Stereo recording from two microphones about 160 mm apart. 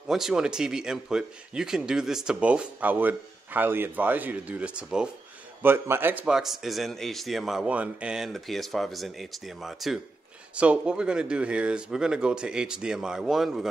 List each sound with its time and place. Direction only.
0.1 s speech: centre (ahead or behind)